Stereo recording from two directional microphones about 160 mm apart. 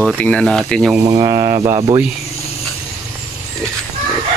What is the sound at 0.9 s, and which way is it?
Speech, 20° right (ahead or behind).